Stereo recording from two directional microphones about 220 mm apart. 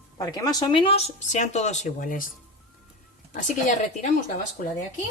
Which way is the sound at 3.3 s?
35° left (ahead or behind).